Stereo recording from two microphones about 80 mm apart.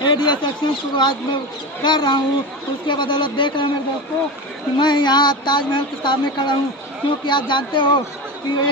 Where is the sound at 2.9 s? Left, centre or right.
Left.